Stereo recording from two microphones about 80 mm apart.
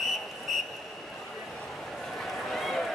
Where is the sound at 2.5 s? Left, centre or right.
Centre.